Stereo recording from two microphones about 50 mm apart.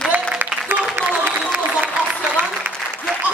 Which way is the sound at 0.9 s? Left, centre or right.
Right.